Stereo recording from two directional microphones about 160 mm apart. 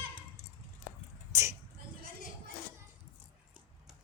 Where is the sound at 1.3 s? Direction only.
20° right (ahead or behind).